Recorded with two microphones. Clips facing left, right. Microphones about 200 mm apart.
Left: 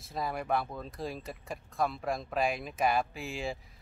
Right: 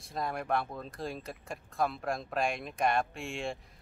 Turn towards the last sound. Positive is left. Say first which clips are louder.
# even
turn(degrees=0)  # may be behind; listen again after turning